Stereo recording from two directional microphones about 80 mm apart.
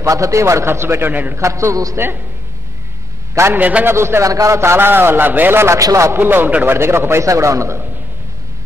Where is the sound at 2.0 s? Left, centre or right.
Right.